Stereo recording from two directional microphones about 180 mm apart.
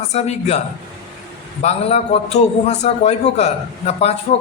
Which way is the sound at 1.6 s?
35° left (ahead or behind).